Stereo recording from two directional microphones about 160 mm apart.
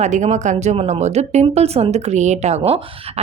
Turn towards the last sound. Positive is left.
turn(degrees=-40)  # may be behind; listen again after turning